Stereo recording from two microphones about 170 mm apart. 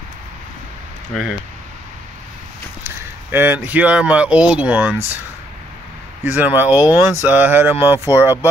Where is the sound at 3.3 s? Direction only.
10° right (ahead or behind).